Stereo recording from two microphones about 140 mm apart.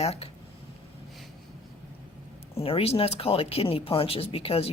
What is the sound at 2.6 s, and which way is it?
Speech, 45° left (ahead or behind).